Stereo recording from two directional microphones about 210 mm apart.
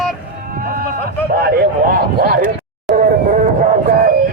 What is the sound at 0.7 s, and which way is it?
Speech, 45° right (ahead or behind).